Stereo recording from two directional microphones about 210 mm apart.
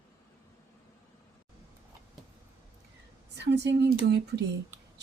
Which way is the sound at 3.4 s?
55° right (ahead or behind).